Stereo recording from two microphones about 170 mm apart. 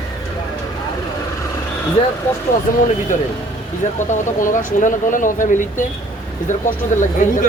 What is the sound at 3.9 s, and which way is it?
Speech, 45° left (ahead or behind).